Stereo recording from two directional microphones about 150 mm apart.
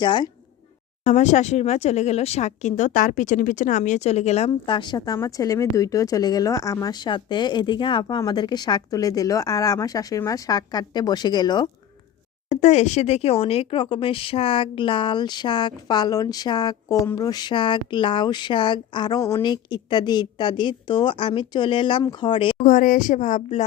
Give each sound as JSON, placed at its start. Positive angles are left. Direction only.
{"t": 0.0, "sound": "speech", "side_deg": 30}
{"t": 1.0, "sound": "speech", "side_deg": 55}
{"t": 12.5, "sound": "speech", "side_deg": 50}
{"t": 22.6, "sound": "speech", "side_deg": 65}